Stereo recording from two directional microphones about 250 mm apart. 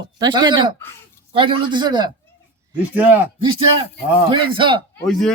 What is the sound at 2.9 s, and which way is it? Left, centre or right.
Speech, centre.